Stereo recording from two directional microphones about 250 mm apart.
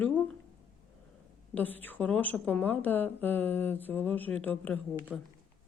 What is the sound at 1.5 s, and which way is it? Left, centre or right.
A woman's voice, centre.